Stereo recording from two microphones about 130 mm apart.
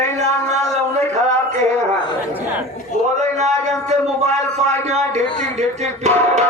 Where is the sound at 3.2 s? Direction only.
60° right (ahead or behind).